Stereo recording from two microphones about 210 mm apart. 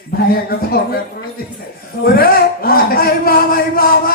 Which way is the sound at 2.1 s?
45° left (ahead or behind).